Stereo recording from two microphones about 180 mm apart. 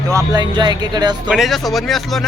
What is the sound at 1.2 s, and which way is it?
Speech, centre (ahead or behind).